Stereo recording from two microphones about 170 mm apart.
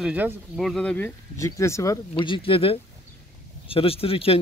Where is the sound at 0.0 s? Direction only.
10° right (ahead or behind); by 2.0 s 15° left (ahead or behind).